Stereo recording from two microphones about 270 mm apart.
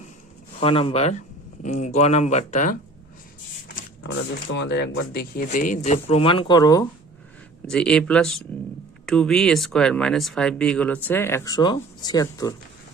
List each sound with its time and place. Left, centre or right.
0.6 s speech: centre
4.5 s speech: left; by 12.5 s centre